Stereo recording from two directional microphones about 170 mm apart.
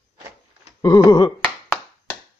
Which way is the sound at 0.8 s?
20° left (ahead or behind).